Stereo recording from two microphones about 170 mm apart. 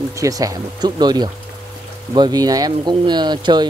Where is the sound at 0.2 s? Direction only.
20° right (ahead or behind).